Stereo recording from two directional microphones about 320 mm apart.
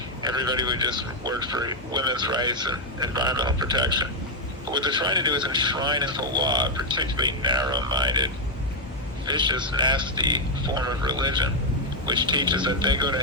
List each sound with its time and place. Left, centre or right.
0.2 s a man's voice: centre